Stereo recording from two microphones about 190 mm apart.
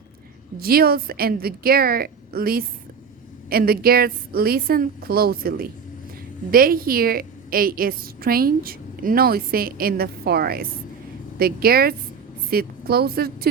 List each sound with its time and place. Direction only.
0.6 s a woman's voice: 55° right (ahead or behind)